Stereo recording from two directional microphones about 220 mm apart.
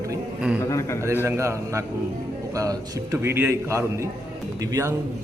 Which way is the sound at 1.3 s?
15° right (ahead or behind).